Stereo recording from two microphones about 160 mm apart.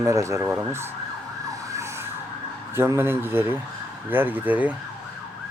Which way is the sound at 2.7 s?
15° right (ahead or behind).